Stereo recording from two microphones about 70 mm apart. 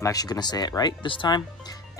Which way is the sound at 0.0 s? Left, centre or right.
Left.